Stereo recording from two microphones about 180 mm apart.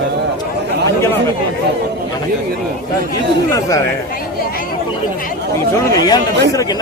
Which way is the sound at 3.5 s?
15° left (ahead or behind).